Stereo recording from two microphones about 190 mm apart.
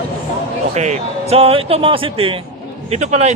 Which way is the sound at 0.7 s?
35° right (ahead or behind).